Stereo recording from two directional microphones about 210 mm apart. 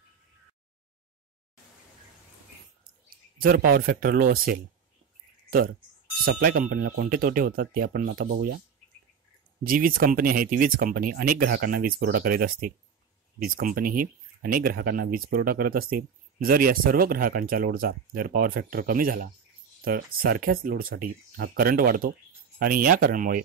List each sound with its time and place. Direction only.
3.1 s speech: 45° right (ahead or behind)
6.2 s speech: 45° right (ahead or behind)
9.6 s speech: 40° right (ahead or behind)